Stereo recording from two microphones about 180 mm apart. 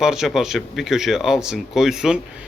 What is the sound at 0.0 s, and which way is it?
A man's voice, centre (ahead or behind).